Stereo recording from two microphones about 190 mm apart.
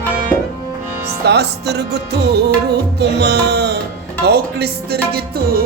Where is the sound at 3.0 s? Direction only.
60° right (ahead or behind).